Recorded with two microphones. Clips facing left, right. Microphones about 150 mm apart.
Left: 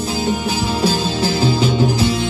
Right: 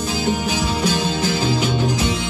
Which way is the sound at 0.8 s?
30° left (ahead or behind).